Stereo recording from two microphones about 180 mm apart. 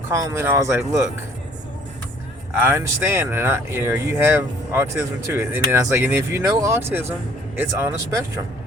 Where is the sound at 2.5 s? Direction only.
15° right (ahead or behind).